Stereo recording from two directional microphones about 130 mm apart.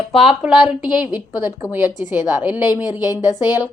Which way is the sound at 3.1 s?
25° left (ahead or behind).